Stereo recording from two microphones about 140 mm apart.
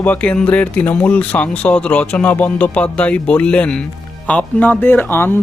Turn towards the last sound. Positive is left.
turn(degrees=15)  # may be behind; listen again after turning